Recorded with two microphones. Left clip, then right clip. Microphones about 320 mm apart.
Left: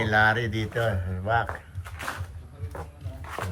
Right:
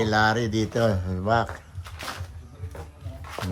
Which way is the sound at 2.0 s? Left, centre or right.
Centre.